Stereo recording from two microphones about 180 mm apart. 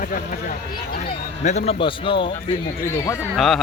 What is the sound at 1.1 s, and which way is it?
A man's voice, 35° left (ahead or behind).